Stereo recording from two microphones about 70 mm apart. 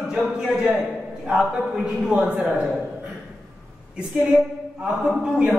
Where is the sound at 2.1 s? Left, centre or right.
Centre.